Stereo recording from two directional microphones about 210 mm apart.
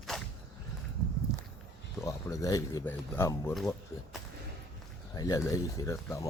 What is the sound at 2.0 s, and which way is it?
Speech, 15° left (ahead or behind).